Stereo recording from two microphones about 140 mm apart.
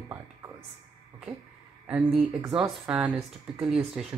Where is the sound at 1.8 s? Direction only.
5° right (ahead or behind).